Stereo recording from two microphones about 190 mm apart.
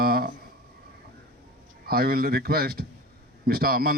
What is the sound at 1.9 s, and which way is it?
A man's voice, 55° right (ahead or behind).